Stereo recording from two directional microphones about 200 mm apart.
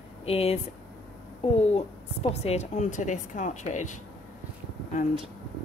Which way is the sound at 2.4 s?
35° left (ahead or behind).